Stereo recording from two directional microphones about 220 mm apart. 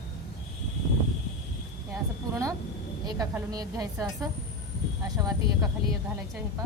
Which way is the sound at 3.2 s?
15° right (ahead or behind).